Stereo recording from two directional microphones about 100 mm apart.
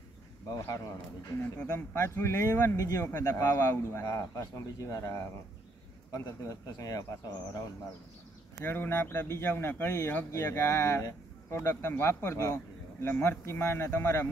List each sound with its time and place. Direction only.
1.8 s speech: 25° left (ahead or behind)
8.6 s speech: 20° left (ahead or behind)